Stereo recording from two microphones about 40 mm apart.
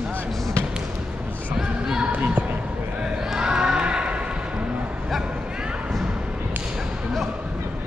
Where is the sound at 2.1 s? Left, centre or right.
Right.